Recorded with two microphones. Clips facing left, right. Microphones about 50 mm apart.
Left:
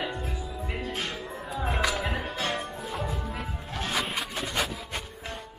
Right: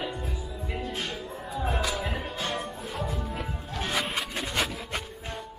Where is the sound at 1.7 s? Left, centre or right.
Left.